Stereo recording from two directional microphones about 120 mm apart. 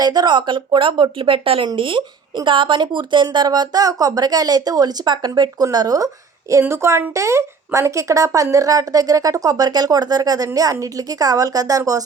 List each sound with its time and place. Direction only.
0.0 s a woman's voice: 35° right (ahead or behind)